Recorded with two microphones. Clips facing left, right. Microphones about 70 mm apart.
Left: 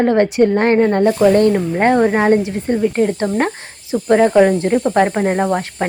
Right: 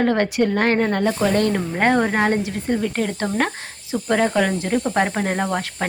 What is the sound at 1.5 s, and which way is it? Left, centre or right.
A woman's voice, centre.